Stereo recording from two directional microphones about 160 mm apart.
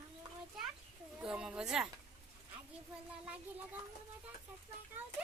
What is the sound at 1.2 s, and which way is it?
Speech, 5° right (ahead or behind).